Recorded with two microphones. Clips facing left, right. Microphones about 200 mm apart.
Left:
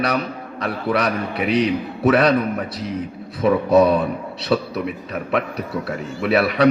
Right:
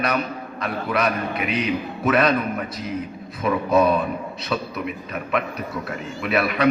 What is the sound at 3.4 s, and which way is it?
A man's voice, 30° left (ahead or behind).